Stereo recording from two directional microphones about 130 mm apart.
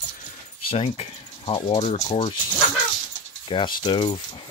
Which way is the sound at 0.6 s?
45° left (ahead or behind).